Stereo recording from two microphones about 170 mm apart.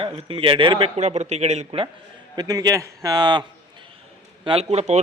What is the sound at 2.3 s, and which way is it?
Speech, 20° right (ahead or behind).